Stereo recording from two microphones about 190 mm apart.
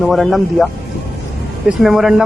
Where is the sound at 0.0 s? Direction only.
Centre (ahead or behind).